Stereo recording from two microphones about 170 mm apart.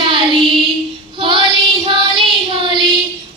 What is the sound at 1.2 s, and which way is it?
Child singing, 30° right (ahead or behind).